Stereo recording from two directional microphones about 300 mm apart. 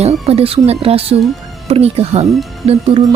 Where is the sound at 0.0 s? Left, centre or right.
Centre.